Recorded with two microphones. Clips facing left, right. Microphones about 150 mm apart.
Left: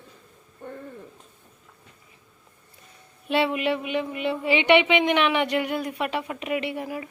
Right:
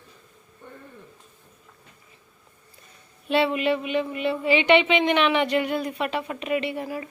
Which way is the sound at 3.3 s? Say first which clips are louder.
Right 1 dB; 15° left (ahead or behind).